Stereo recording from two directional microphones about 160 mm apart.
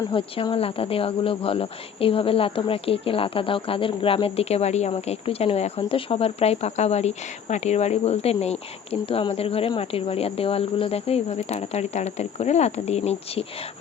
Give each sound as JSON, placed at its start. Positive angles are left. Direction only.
{"t": 0.1, "sound": "speech", "side_deg": 30}